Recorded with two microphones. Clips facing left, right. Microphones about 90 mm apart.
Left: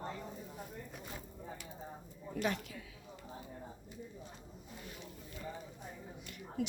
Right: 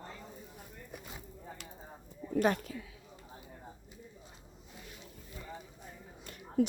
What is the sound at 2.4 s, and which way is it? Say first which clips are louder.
Speech: right 7 dB; 45° right (ahead or behind).